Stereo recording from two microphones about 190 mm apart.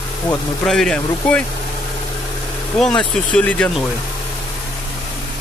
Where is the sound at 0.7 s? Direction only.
5° left (ahead or behind).